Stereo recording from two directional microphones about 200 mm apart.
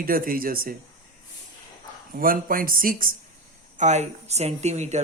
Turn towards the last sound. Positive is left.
turn(degrees=-35)  # may be behind; listen again after turning